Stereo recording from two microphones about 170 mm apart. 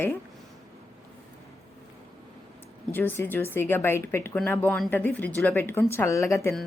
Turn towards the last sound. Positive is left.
turn(degrees=15)  # may be behind; listen again after turning